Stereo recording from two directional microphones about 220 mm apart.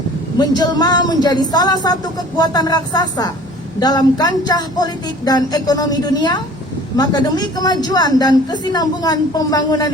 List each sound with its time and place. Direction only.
0.3 s a woman's voice: 15° left (ahead or behind)